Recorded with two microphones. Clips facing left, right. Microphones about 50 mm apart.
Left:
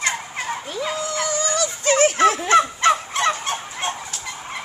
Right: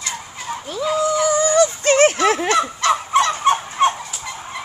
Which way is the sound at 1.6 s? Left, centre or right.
Right.